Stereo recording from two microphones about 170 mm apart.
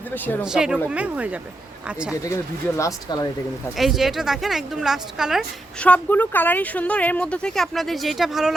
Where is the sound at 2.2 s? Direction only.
20° left (ahead or behind).